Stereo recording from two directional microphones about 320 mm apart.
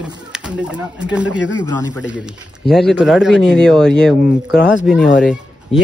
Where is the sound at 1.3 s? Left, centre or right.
Left.